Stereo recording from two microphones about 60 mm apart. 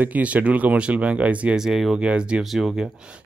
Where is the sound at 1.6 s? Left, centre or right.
Centre.